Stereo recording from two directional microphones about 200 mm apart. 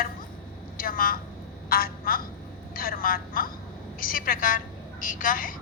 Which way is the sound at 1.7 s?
45° left (ahead or behind).